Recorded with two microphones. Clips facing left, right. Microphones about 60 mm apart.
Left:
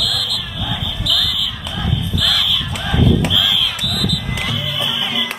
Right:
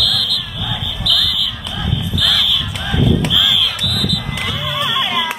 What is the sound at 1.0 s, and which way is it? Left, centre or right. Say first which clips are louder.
Fire alarm: right 3 dB; centre.